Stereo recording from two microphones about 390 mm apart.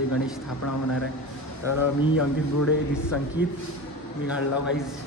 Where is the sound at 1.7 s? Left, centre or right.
Left.